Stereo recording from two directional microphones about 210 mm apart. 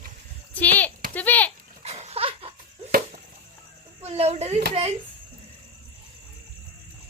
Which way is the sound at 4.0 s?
30° right (ahead or behind).